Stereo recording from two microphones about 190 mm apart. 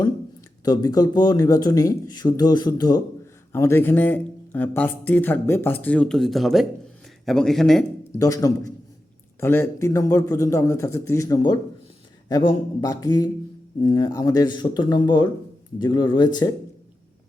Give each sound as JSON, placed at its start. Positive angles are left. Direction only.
{"t": 0.6, "sound": "speech", "side_deg": 20}
{"t": 8.2, "sound": "speech", "side_deg": 15}